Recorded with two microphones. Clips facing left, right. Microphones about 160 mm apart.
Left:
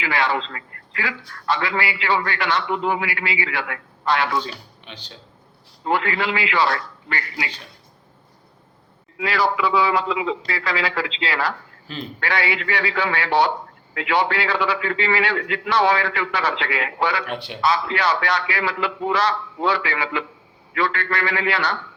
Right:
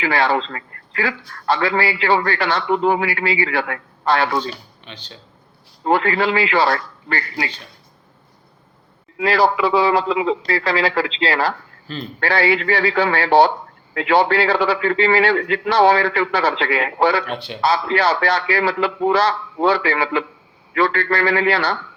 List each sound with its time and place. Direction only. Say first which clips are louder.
0.0 s a man's voice: right 4 dB; 30° right (ahead or behind)
4.9 s speech: right 2 dB; 10° left (ahead or behind)
5.8 s a man's voice: right 5 dB; 35° right (ahead or behind)
9.1 s a man's voice: right 5 dB; 35° right (ahead or behind)
17.3 s speech: right 2 dB; 10° left (ahead or behind)
17.6 s a man's voice: right 4 dB; 30° right (ahead or behind)